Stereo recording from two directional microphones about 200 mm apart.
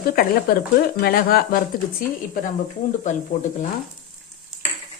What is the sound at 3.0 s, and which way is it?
Speech, 35° left (ahead or behind).